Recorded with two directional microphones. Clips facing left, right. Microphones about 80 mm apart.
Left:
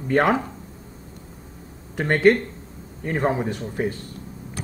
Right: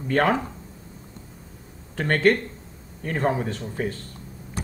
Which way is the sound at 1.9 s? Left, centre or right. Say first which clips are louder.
Left 3 dB; centre.